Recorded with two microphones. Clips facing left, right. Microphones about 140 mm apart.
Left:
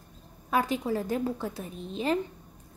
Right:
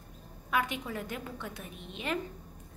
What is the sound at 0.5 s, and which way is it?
A woman's voice, 35° left (ahead or behind).